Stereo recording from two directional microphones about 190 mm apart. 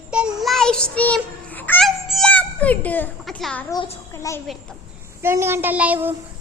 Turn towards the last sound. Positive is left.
turn(degrees=-10)  # may be behind; listen again after turning